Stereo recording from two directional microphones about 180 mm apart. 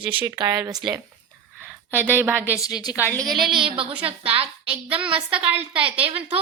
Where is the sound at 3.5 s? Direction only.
30° right (ahead or behind).